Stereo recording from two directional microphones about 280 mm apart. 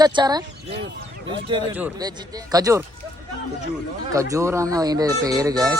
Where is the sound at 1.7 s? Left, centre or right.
Centre.